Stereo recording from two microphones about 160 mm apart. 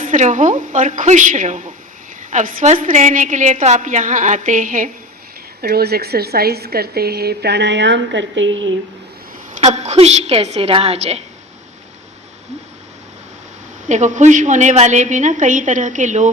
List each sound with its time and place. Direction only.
0.0 s a woman's voice: 50° right (ahead or behind)
5.6 s a woman's voice: 75° right (ahead or behind)
9.5 s a woman's voice: 45° right (ahead or behind)
13.8 s a woman's voice: 50° right (ahead or behind)